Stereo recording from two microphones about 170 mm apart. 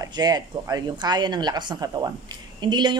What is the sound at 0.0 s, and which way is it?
Speech, 25° right (ahead or behind).